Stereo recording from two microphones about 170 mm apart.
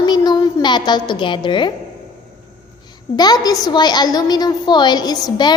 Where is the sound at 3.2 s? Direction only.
25° left (ahead or behind).